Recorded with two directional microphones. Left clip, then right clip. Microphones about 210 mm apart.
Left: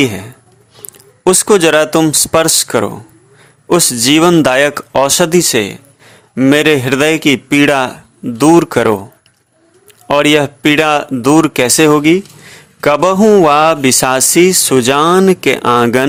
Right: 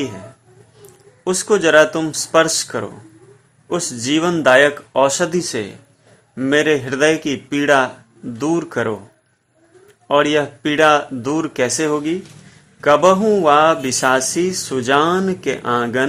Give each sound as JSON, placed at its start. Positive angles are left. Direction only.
{"t": 1.2, "sound": "a man's voice", "side_deg": 35}
{"t": 10.1, "sound": "a man's voice", "side_deg": 35}